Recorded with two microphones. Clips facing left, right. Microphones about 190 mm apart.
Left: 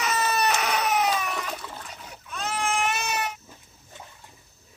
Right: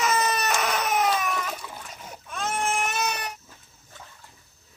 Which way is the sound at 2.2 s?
50° right (ahead or behind).